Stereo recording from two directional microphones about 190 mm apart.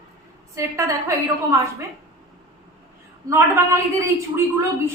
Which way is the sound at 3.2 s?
15° right (ahead or behind).